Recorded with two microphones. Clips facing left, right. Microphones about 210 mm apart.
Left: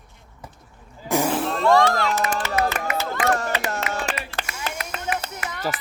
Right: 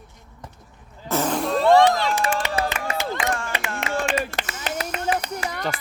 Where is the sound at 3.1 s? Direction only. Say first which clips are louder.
Left 4 dB; 40° left (ahead or behind).